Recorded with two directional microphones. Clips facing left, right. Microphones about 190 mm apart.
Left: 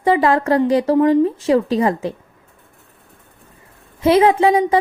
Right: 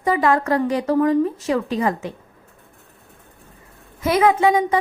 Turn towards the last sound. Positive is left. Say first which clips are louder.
# left 2 dB
turn(degrees=30)  # may be behind; listen again after turning